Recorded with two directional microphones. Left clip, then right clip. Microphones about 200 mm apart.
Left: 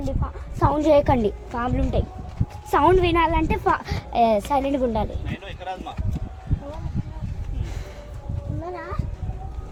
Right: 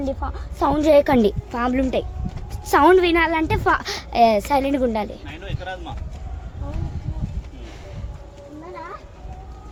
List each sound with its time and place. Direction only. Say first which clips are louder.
0.6 s a woman's voice: right 2 dB; 10° right (ahead or behind)
1.2 s a woman's voice: right 4 dB; 25° right (ahead or behind)
5.5 s a sound: right 1 dB; 15° right (ahead or behind)